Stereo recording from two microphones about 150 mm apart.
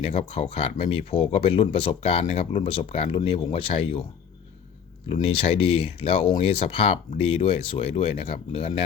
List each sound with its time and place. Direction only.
0.0 s speech: 40° left (ahead or behind)
5.2 s speech: 40° left (ahead or behind)